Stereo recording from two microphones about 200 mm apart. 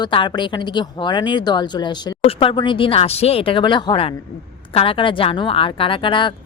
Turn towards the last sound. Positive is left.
turn(degrees=25)  # may be behind; listen again after turning